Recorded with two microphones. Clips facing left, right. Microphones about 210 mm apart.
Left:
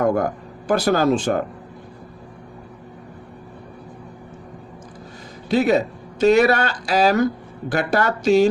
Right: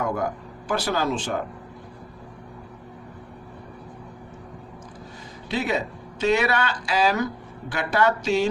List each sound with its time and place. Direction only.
0.0 s speech: 50° left (ahead or behind)
5.5 s speech: 40° left (ahead or behind)